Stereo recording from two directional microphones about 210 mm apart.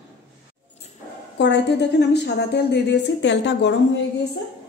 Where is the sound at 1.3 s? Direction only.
55° left (ahead or behind).